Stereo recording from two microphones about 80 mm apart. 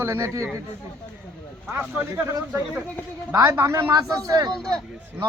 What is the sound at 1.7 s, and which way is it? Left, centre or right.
Speech, right.